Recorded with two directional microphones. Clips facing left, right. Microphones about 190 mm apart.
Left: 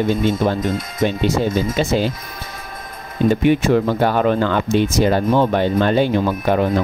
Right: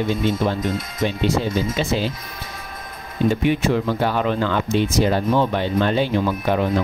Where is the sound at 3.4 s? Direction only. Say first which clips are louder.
Left 4 dB; 50° left (ahead or behind).